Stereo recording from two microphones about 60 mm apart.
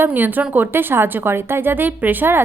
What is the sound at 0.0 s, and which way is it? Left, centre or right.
A woman's voice, right.